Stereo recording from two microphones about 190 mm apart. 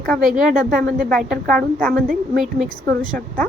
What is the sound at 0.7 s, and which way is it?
Speech, 50° right (ahead or behind).